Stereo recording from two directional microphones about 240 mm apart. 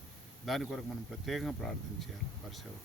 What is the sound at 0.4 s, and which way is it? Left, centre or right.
Speech, centre.